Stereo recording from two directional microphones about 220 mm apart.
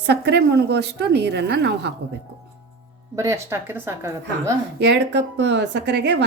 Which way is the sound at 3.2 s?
10° right (ahead or behind).